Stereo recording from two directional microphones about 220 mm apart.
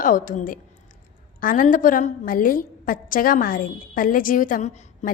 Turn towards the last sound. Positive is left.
turn(degrees=40)  # may be behind; listen again after turning